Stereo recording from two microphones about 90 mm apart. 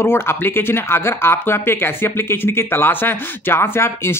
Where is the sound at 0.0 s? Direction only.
25° left (ahead or behind).